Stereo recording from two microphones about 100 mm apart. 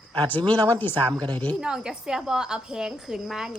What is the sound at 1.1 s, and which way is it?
Speech, 40° right (ahead or behind).